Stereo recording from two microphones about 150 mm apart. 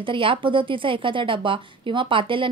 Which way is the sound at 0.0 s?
35° right (ahead or behind).